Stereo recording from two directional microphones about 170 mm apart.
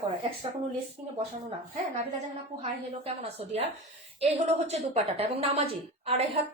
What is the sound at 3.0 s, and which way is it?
A woman's voice, 35° right (ahead or behind).